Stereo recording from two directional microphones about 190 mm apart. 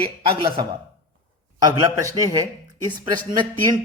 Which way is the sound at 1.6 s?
20° right (ahead or behind).